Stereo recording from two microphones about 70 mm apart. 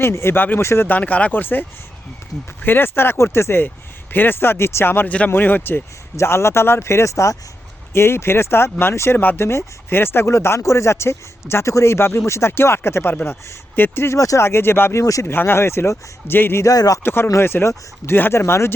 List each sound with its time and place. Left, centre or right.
0.0 s speech: left
0.9 s speech: left
2.6 s speech: left
7.9 s speech: left
13.0 s speech: left
14.2 s speech: left
14.4 s speech: left
15.0 s speech: left
15.3 s speech: left
16.6 s speech: left
17.0 s speech: left